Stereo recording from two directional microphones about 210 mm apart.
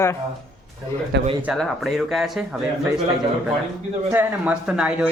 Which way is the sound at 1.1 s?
55° right (ahead or behind).